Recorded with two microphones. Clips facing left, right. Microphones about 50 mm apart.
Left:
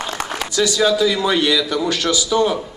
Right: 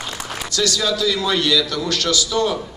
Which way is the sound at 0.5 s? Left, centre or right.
Centre.